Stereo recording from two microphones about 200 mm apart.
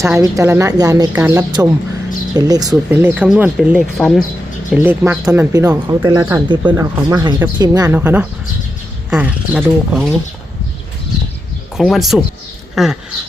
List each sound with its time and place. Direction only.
0.0 s speech: 15° right (ahead or behind); by 4.2 s centre (ahead or behind)
4.7 s speech: 10° right (ahead or behind)
11.8 s speech: centre (ahead or behind)